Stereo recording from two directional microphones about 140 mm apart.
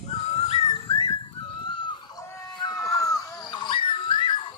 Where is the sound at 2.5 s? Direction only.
30° left (ahead or behind).